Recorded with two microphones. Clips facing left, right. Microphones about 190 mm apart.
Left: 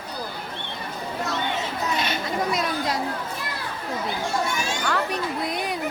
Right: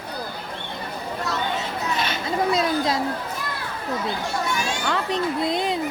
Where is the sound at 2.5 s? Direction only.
25° right (ahead or behind).